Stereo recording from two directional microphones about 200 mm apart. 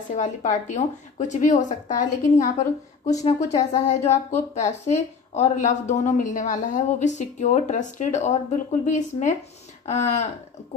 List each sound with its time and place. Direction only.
0.1 s a woman's voice: 40° left (ahead or behind)